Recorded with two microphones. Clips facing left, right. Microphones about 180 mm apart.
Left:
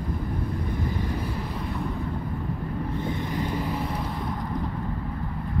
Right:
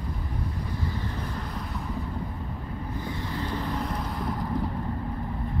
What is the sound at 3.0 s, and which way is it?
Vehicle, 15° left (ahead or behind).